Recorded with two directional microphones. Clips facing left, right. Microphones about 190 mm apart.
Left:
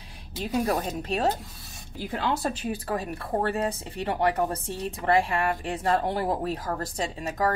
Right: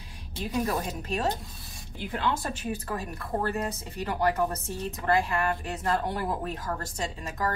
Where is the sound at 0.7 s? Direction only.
35° left (ahead or behind).